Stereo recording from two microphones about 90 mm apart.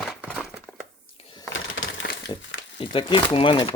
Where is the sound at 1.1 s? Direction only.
90° left.